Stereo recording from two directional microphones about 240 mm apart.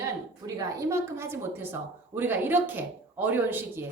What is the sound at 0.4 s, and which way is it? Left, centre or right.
A woman's voice, centre.